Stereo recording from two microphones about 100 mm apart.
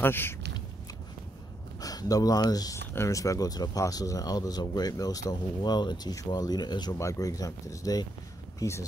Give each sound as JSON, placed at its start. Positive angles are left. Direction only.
{"t": 0.0, "sound": "speech", "side_deg": 20}
{"t": 1.8, "sound": "speech", "side_deg": 40}
{"t": 7.0, "sound": "speech", "side_deg": 35}